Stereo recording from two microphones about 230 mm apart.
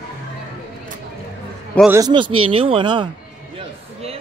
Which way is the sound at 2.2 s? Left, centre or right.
Right.